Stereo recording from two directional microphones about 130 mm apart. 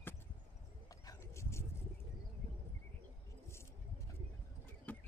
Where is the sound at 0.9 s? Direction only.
30° left (ahead or behind).